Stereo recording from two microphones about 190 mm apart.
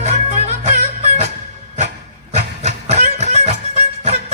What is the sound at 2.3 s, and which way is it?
Music, 35° right (ahead or behind).